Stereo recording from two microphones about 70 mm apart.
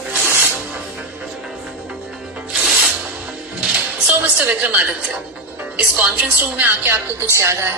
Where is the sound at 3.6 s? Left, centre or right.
Centre.